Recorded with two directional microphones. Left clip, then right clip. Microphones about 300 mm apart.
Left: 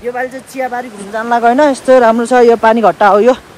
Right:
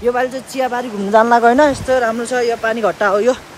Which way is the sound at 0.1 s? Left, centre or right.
Centre.